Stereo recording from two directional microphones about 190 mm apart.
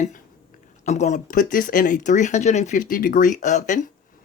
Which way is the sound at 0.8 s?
40° left (ahead or behind).